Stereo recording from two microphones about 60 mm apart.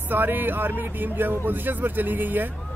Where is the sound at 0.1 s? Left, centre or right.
Right.